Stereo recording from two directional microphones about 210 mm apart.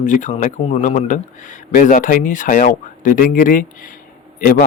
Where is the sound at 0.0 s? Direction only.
35° left (ahead or behind).